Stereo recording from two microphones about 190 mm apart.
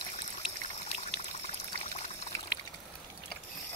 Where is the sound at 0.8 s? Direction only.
30° left (ahead or behind).